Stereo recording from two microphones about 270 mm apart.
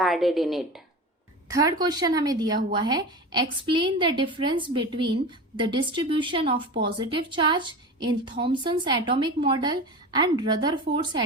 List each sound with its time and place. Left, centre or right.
0.0 s speech: centre
1.5 s a woman's voice: centre